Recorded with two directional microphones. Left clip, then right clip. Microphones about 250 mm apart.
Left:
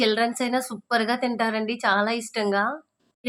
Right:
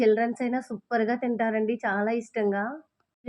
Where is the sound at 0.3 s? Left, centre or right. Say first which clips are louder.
Left 4 dB; centre.